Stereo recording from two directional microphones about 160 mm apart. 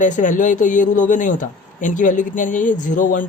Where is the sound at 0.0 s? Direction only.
55° left (ahead or behind).